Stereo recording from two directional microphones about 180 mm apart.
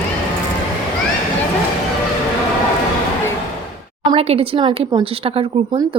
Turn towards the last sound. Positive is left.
turn(degrees=-30)  # may be behind; listen again after turning